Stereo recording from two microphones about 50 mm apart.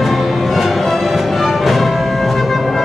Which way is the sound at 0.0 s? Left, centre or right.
Centre.